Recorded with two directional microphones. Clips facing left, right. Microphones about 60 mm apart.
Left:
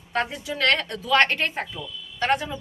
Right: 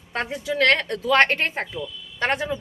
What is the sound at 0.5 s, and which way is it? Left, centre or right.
A woman's voice, right.